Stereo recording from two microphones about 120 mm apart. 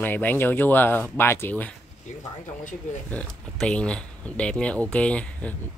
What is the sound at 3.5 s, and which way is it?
Speech, 10° left (ahead or behind).